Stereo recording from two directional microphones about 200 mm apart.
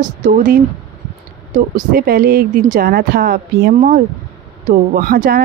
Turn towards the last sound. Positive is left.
turn(degrees=-45)  # may be behind; listen again after turning